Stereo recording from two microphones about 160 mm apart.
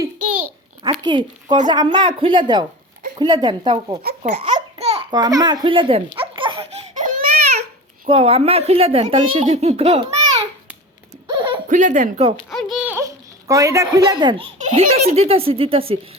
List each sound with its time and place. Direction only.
0.8 s speech: 25° right (ahead or behind)
4.2 s babbling: 45° right (ahead or behind)
5.1 s speech: 25° right (ahead or behind)
6.1 s laughter: 30° right (ahead or behind)
6.9 s baby cry: 55° right (ahead or behind)
8.0 s speech: 35° right (ahead or behind)
11.3 s a sound: 30° right (ahead or behind)
11.7 s speech: 50° right (ahead or behind)
12.5 s a sound: centre (ahead or behind)
12.9 s a child's voice: 20° right (ahead or behind)
14.6 s a child's voice: 45° right (ahead or behind)